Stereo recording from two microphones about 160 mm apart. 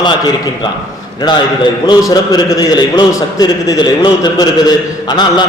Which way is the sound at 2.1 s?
25° left (ahead or behind).